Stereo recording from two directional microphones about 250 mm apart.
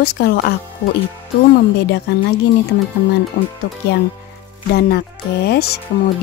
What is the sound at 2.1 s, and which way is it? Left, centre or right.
Speech, left.